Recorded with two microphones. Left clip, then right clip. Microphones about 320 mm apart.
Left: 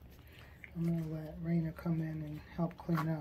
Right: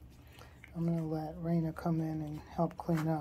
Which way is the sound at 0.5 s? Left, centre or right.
Centre.